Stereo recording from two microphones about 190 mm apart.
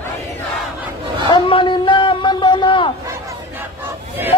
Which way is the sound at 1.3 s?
25° left (ahead or behind).